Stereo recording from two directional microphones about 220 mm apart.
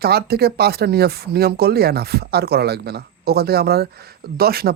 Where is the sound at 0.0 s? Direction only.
45° right (ahead or behind).